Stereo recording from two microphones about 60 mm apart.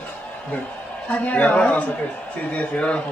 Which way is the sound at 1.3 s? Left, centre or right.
Left.